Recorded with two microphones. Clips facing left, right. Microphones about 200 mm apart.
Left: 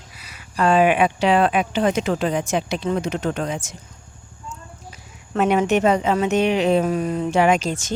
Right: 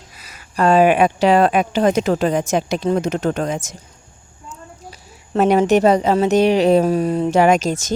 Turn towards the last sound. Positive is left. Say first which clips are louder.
# right 4 dB
turn(degrees=-40)  # may be behind; listen again after turning